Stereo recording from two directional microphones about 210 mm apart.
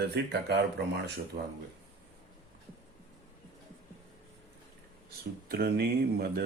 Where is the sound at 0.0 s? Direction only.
50° right (ahead or behind).